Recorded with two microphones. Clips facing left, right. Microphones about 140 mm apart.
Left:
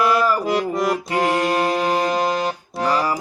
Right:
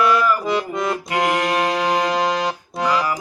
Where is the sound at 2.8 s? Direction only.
35° left (ahead or behind).